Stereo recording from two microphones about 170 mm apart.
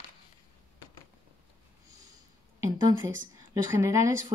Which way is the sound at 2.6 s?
20° right (ahead or behind).